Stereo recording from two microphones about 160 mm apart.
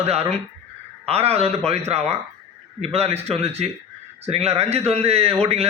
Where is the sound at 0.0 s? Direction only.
40° right (ahead or behind).